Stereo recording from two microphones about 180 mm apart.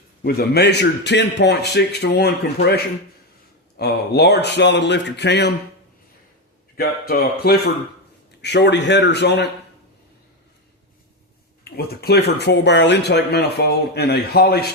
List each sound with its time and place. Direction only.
0.2 s a man's voice: 55° left (ahead or behind)
6.7 s a man's voice: 60° left (ahead or behind)
11.6 s speech: 60° left (ahead or behind)